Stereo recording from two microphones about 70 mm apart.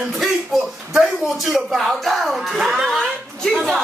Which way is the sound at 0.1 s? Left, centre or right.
Centre.